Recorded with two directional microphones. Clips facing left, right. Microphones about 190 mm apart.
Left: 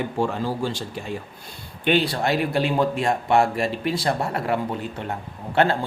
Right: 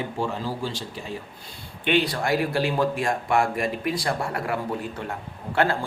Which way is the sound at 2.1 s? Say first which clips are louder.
Left 1 dB; 25° left (ahead or behind).